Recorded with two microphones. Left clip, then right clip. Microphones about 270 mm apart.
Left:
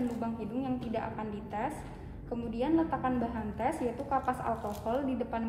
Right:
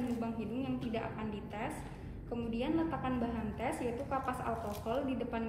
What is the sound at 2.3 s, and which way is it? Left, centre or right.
A woman's voice, left.